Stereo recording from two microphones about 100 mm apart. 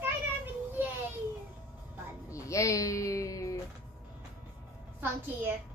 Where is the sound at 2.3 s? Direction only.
30° left (ahead or behind).